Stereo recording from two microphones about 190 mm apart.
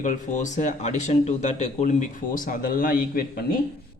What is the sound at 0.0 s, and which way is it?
A man's voice, 40° left (ahead or behind).